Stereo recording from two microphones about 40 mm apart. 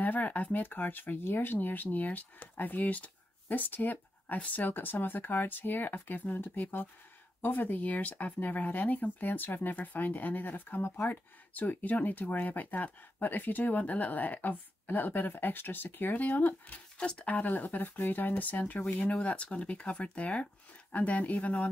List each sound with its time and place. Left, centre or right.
0.0 s speech: left
0.6 s speech: left
4.7 s speech: left
16.2 s speech: left
17.0 s speech: left
17.3 s speech: left
19.2 s speech: left
20.9 s speech: left